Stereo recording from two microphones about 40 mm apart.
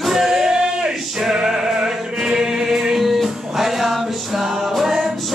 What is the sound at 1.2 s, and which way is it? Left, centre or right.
Music, centre.